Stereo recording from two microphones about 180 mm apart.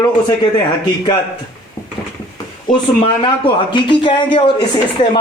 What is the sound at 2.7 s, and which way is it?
Speech, 25° left (ahead or behind).